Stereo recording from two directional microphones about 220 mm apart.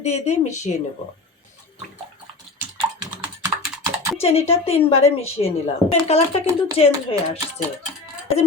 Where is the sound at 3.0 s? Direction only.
10° right (ahead or behind).